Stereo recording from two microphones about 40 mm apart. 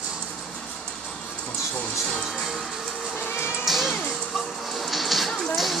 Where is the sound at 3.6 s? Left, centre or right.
Centre.